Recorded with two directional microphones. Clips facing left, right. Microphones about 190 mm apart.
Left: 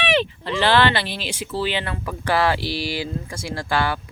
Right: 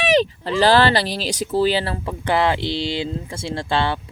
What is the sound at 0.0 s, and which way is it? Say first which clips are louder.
Speech: right 4 dB; 40° right (ahead or behind).